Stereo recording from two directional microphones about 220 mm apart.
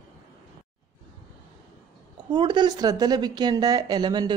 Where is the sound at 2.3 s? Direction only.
20° right (ahead or behind).